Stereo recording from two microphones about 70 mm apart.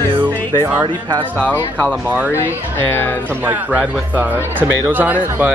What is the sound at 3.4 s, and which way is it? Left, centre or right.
Speech, centre.